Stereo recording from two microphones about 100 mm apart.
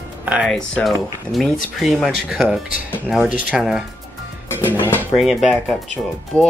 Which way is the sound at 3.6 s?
5° right (ahead or behind).